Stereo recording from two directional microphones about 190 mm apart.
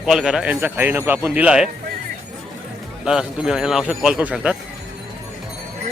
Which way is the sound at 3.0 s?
5° right (ahead or behind).